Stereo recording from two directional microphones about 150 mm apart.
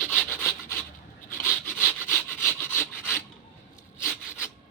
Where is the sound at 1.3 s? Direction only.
15° left (ahead or behind).